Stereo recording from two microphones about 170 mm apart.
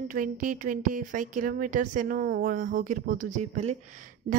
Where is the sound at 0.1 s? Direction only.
55° right (ahead or behind).